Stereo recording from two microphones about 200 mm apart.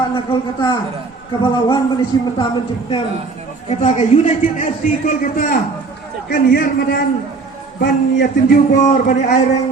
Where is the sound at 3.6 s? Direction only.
35° left (ahead or behind).